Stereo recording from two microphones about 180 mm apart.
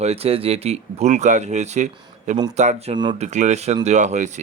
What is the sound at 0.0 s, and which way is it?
Speech, 35° right (ahead or behind).